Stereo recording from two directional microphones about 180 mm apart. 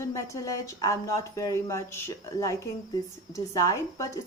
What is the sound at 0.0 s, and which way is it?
A woman's voice, 15° left (ahead or behind).